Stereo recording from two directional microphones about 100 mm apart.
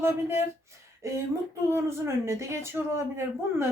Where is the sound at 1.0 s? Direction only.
30° right (ahead or behind).